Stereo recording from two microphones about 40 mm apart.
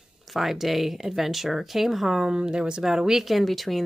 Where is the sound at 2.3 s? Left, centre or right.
Right.